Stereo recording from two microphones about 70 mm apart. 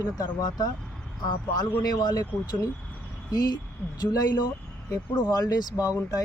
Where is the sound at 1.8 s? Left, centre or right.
Left.